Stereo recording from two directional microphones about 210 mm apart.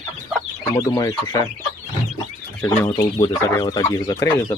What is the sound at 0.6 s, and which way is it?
Chicken, 15° left (ahead or behind).